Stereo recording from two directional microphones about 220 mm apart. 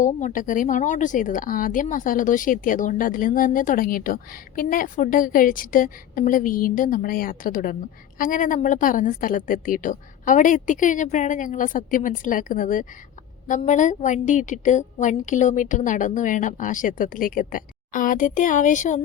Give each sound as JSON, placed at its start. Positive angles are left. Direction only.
{"t": 0.0, "sound": "speech", "side_deg": 35}